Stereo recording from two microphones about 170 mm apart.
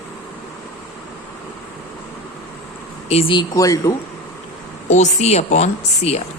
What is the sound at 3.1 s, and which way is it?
Speech, 35° left (ahead or behind).